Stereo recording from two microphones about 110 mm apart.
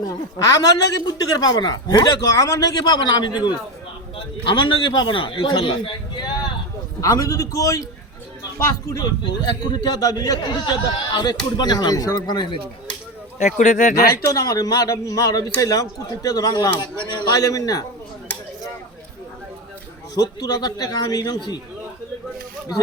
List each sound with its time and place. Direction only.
0.3 s a man's voice: 30° left (ahead or behind); by 6.3 s 50° left (ahead or behind)
7.0 s a man's voice: 35° left (ahead or behind)
13.9 s a man's voice: 30° left (ahead or behind)
20.1 s a man's voice: 35° left (ahead or behind)